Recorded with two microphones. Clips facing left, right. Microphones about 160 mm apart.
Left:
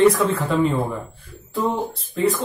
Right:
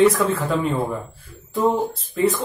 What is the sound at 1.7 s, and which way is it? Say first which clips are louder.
Speech: right 3 dB; centre (ahead or behind).